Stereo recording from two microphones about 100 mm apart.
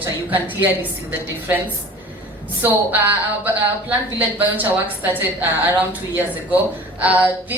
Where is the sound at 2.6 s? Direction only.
20° right (ahead or behind).